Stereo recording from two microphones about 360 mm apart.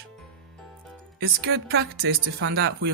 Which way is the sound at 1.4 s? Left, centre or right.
Right.